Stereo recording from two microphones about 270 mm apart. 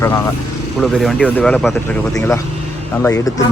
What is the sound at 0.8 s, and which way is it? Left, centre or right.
Speech, centre.